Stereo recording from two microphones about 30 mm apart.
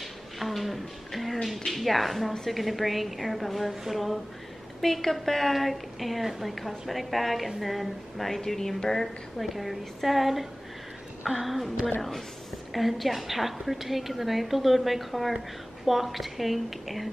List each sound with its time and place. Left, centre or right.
0.4 s a sound: centre
1.7 s a woman's voice: centre
4.8 s a woman's voice: centre
9.4 s a woman's voice: centre
12.7 s a woman's voice: centre